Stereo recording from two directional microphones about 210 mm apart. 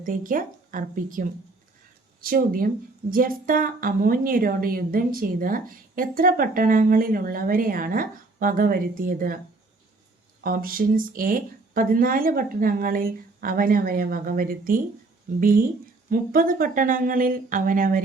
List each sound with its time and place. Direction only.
0.0 s speech: 40° right (ahead or behind)
10.4 s speech: 45° right (ahead or behind)